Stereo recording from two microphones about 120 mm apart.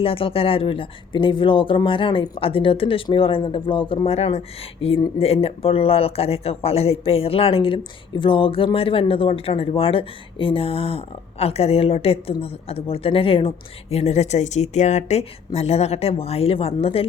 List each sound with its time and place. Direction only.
0.0 s speech: 50° left (ahead or behind)
13.9 s speech: 60° left (ahead or behind)